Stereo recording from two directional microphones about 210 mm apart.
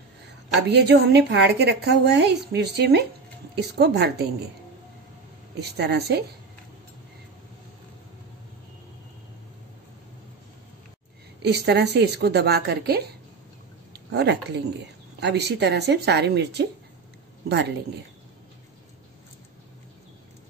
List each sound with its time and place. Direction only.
0.6 s a woman's voice: 55° right (ahead or behind)
5.6 s a woman's voice: 50° right (ahead or behind)
11.4 s a woman's voice: 50° right (ahead or behind)